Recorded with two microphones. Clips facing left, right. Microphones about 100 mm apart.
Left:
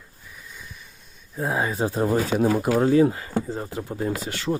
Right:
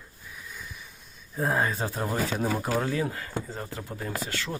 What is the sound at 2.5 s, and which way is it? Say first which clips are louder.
Speech: left 6 dB; 5° left (ahead or behind).